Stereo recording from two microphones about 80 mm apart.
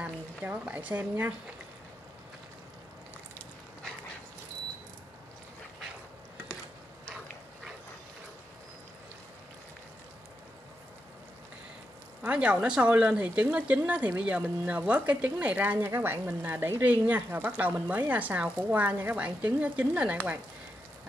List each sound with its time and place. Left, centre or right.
0.0 s a woman's voice: right
12.2 s speech: centre